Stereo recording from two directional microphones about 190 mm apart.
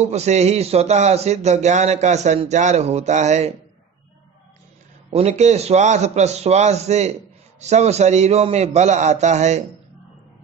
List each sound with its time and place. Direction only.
0.0 s a man's voice: 35° right (ahead or behind)
5.1 s a man's voice: 35° right (ahead or behind)